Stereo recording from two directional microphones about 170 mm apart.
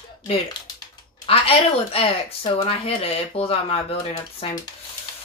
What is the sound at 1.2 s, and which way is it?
Speech, 35° left (ahead or behind).